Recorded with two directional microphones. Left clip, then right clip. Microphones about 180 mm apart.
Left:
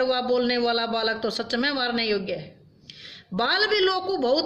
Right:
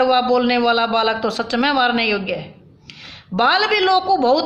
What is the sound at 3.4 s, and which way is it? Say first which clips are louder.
A woman's voice: right 6 dB; 15° left (ahead or behind).